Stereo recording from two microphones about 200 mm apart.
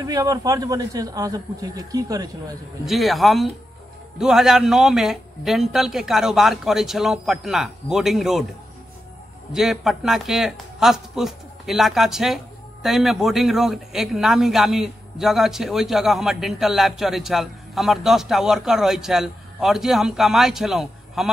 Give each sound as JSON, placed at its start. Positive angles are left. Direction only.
{"t": 0.0, "sound": "a man's voice", "side_deg": -15}
{"t": 2.8, "sound": "speech", "side_deg": 0}
{"t": 9.5, "sound": "speech", "side_deg": 0}